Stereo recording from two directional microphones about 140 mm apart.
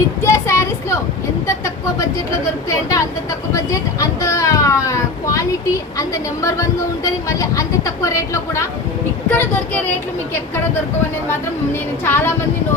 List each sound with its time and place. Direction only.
0.2 s a sound: 20° left (ahead or behind)
2.6 s a child's voice: 20° left (ahead or behind)
4.2 s a child's voice: 20° left (ahead or behind)
11.3 s a woman's voice: 15° left (ahead or behind)